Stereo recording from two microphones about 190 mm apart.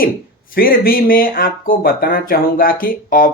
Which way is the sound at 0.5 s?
50° left (ahead or behind).